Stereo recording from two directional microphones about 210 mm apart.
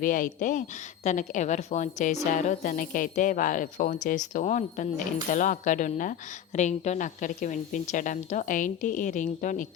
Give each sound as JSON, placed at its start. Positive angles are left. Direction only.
{"t": 0.0, "sound": "speech", "side_deg": 40}